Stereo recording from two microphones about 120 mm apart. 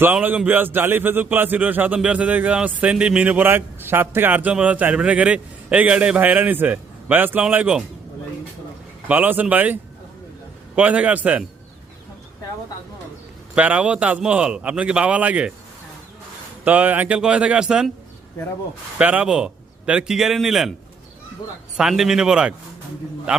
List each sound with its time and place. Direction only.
0.0 s a man's voice: 15° right (ahead or behind)
9.0 s a man's voice: 15° right (ahead or behind)
10.8 s a man's voice: 10° right (ahead or behind)
13.6 s a man's voice: 10° right (ahead or behind)
16.6 s a man's voice: 15° right (ahead or behind)
18.9 s a man's voice: 10° right (ahead or behind)
21.8 s speech: 5° right (ahead or behind)